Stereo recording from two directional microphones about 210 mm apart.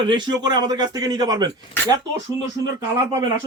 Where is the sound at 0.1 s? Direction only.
20° right (ahead or behind).